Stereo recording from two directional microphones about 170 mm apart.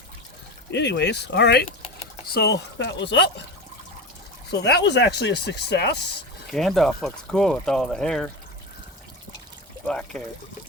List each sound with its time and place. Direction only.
0.7 s speech: 90° left
2.2 s speech: 70° left (ahead or behind); by 3.2 s 90° left
4.5 s speech: 85° left
6.5 s speech: centre (ahead or behind)
9.8 s speech: 5° left (ahead or behind)